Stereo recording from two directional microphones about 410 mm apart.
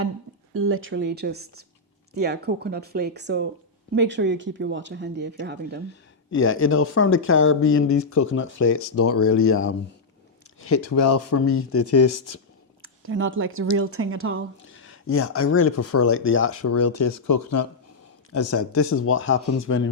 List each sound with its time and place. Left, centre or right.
0.5 s speech: right
5.9 s speech: left
12.8 s speech: right
14.7 s speech: left